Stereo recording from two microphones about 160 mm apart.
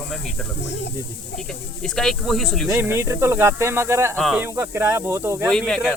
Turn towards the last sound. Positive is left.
turn(degrees=5)  # may be behind; listen again after turning